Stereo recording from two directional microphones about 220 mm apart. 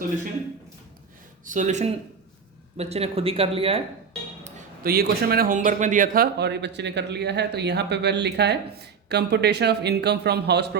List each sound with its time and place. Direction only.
1.5 s speech: 35° right (ahead or behind)
4.4 s a man's voice: 40° right (ahead or behind)